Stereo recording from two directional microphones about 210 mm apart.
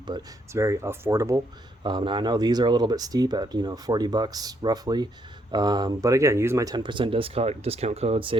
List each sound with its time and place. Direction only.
0.1 s speech: 15° right (ahead or behind)